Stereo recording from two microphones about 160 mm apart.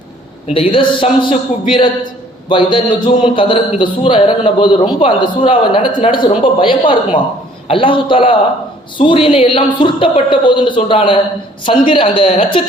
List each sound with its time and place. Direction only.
0.4 s a man's voice: 35° left (ahead or behind)
2.5 s a man's voice: 30° left (ahead or behind)